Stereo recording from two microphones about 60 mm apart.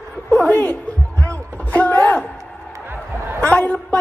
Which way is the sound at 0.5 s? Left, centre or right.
Left.